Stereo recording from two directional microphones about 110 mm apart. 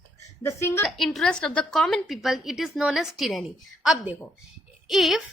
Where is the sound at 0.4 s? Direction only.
25° left (ahead or behind).